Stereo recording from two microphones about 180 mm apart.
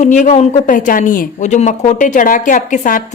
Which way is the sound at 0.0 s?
40° left (ahead or behind).